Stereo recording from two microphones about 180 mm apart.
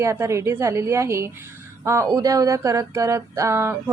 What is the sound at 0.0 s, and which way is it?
Speech, 15° right (ahead or behind).